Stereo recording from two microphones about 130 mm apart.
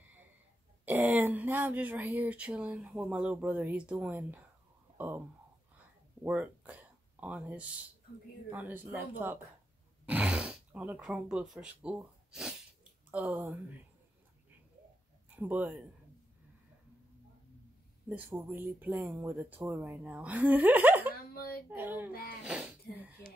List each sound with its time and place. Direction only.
0.8 s speech: 15° right (ahead or behind)
6.2 s speech: 10° right (ahead or behind)
15.2 s speech: 15° right (ahead or behind)
18.3 s speech: 20° right (ahead or behind)